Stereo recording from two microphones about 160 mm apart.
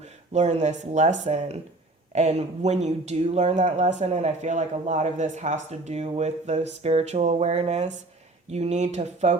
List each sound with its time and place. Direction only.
0.0 s speech: 45° right (ahead or behind)